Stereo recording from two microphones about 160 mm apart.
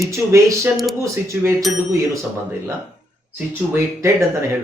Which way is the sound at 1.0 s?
20° right (ahead or behind).